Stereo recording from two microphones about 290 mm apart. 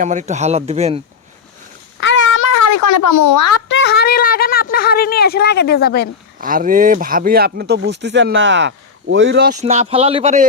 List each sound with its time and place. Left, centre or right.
0.0 s speech: right
2.0 s a sound: left
3.7 s speech: left
6.4 s speech: right